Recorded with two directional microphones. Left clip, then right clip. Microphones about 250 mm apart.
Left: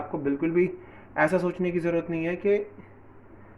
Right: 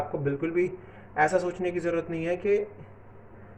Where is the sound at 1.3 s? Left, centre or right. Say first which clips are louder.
Even; left.